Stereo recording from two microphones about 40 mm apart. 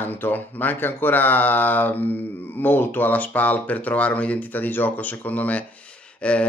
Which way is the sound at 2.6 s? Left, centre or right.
Left.